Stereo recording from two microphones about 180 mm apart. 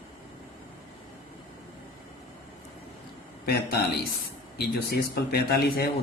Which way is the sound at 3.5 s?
60° left (ahead or behind).